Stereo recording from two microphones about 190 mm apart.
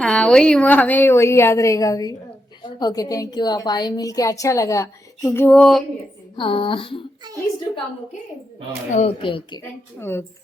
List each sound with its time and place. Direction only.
0.0 s a woman's voice: 5° left (ahead or behind)
6.3 s a woman's voice: 25° left (ahead or behind)
8.9 s speech: 40° left (ahead or behind)
9.2 s a woman's voice: 25° left (ahead or behind)
9.6 s a woman's voice: 10° left (ahead or behind)